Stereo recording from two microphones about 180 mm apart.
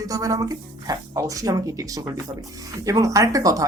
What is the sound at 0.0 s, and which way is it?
Speech, 20° right (ahead or behind).